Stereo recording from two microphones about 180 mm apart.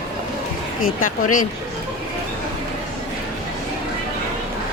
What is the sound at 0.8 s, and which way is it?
Speech, 50° left (ahead or behind).